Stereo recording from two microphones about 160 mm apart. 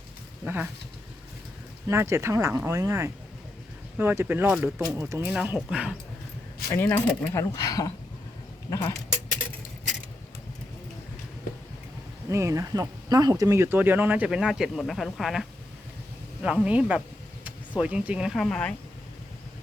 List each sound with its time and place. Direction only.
0.4 s speech: 10° right (ahead or behind)
1.9 s speech: 15° right (ahead or behind)
6.7 s speech: 10° left (ahead or behind)
12.3 s speech: 20° right (ahead or behind); by 18.7 s 5° left (ahead or behind)